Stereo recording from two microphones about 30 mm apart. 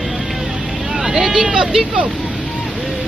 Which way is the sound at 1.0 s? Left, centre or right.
Centre.